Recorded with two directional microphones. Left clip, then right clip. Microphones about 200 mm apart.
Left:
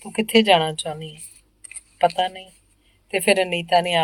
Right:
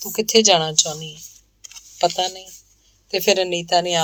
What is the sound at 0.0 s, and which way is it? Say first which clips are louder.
Speech: right 2 dB; 30° right (ahead or behind).